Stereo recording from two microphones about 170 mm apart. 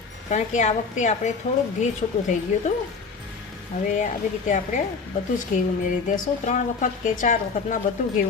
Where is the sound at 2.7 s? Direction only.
40° left (ahead or behind).